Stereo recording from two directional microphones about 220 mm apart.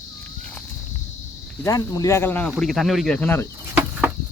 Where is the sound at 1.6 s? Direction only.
15° left (ahead or behind).